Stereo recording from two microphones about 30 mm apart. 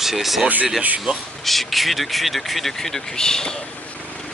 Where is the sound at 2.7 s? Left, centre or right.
Centre.